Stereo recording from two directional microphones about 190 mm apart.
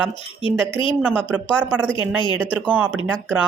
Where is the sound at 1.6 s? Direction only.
5° left (ahead or behind).